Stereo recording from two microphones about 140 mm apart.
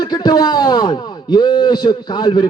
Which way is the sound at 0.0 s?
30° left (ahead or behind).